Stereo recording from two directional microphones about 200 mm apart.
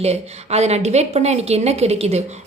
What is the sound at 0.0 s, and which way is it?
A woman's voice, 30° right (ahead or behind).